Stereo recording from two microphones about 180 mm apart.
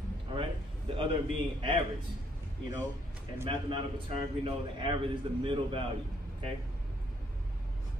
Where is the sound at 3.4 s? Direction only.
30° right (ahead or behind).